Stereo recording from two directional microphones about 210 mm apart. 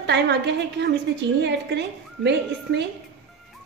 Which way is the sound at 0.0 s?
55° right (ahead or behind).